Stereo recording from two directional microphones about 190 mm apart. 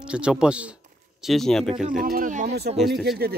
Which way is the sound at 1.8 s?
45° right (ahead or behind).